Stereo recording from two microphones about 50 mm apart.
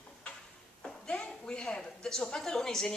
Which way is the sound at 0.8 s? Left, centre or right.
Centre.